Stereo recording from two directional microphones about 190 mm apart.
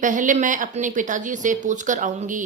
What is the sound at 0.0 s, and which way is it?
A woman's voice, 40° right (ahead or behind).